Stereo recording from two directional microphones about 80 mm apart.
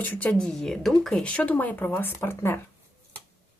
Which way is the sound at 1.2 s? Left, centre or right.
Centre.